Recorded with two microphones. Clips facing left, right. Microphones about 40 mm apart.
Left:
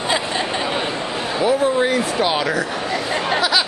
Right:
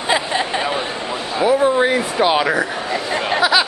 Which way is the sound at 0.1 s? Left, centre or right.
Centre.